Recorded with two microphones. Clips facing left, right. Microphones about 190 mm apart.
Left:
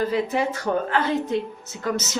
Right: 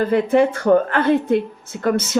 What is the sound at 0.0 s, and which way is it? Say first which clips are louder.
A woman's voice: right 7 dB; 55° right (ahead or behind).